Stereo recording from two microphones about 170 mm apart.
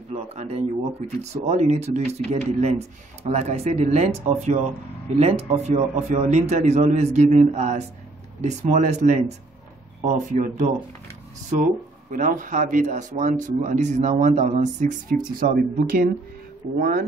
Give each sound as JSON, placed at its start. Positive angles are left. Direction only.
{"t": 0.1, "sound": "speech", "side_deg": -40}
{"t": 11.6, "sound": "speech", "side_deg": -55}
{"t": 15.3, "sound": "speech", "side_deg": -60}